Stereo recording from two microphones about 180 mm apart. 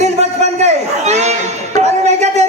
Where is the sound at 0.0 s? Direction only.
40° right (ahead or behind).